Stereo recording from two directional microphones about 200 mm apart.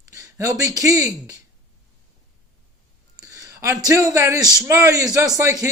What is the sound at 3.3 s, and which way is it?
A man's voice, 15° right (ahead or behind).